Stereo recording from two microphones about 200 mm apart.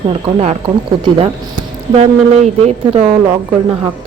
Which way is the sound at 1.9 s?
35° right (ahead or behind).